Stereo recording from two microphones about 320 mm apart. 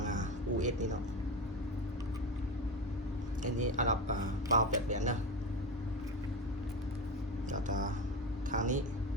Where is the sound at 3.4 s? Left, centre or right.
Right.